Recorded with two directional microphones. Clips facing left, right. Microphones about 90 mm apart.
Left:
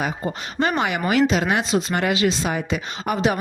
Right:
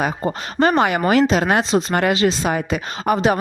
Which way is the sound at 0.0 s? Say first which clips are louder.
Right 4 dB; 45° right (ahead or behind).